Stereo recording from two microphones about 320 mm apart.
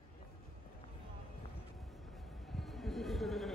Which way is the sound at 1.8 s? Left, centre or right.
Centre.